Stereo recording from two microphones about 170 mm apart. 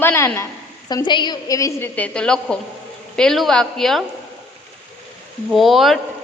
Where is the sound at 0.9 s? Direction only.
25° left (ahead or behind); by 4.1 s centre (ahead or behind).